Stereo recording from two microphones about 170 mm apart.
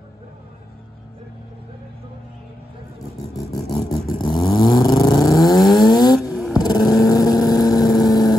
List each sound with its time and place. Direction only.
4.1 s vehicle: 25° left (ahead or behind)
6.3 s vehicle: centre (ahead or behind)
6.6 s vehicle: 25° left (ahead or behind)